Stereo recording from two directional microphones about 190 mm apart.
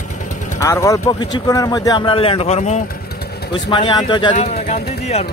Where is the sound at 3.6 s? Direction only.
25° left (ahead or behind).